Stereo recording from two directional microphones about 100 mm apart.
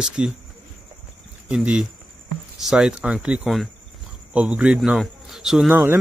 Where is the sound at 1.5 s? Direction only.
10° right (ahead or behind).